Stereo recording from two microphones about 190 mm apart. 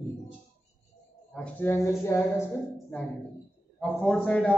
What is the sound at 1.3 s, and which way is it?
Speech, 10° left (ahead or behind).